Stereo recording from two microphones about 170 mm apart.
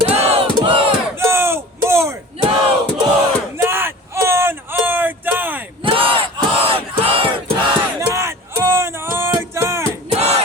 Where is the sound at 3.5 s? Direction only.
15° right (ahead or behind).